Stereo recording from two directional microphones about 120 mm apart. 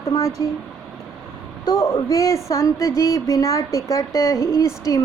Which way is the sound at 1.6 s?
30° left (ahead or behind).